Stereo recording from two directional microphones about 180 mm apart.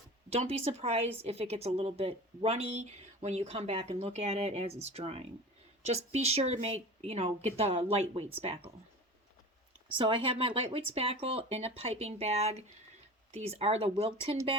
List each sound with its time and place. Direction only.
0.3 s a woman's voice: 35° right (ahead or behind)
9.9 s a woman's voice: 30° right (ahead or behind)